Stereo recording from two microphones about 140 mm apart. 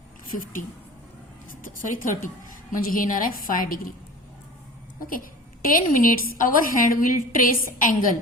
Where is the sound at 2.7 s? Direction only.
85° left.